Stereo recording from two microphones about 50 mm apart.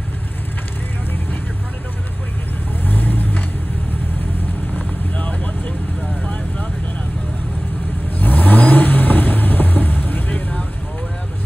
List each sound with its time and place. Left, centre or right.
2.8 s vehicle: left
8.2 s vehicle: left